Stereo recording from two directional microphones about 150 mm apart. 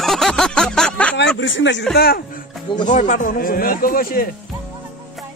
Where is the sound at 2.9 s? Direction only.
60° left (ahead or behind).